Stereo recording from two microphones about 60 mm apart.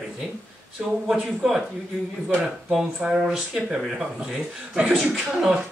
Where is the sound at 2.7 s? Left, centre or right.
Centre.